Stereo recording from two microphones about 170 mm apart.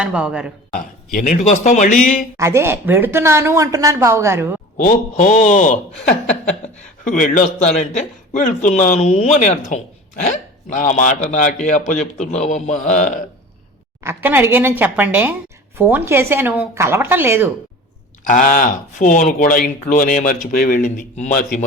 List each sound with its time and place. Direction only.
0.0 s speech: 5° right (ahead or behind)
1.1 s speech: 50° left (ahead or behind)
2.4 s a woman's voice: 15° right (ahead or behind)
4.8 s speech: 50° left (ahead or behind)
7.0 s speech: 50° left (ahead or behind)
14.0 s a woman's voice: 15° right (ahead or behind)
18.3 s speech: 50° left (ahead or behind)